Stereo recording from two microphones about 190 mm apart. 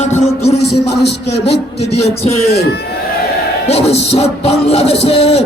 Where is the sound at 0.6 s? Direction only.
60° left (ahead or behind).